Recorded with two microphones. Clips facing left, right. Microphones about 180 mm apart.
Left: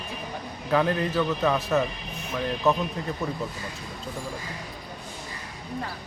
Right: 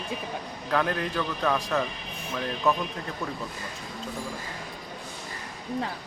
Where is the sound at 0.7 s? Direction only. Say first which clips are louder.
Left 3 dB; 5° left (ahead or behind).